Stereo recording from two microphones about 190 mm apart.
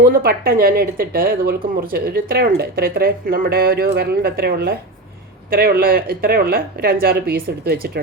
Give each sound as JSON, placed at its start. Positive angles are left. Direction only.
{"t": 0.2, "sound": "speech", "side_deg": -50}